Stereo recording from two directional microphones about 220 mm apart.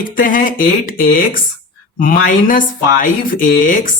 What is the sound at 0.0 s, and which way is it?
Speech, 40° left (ahead or behind).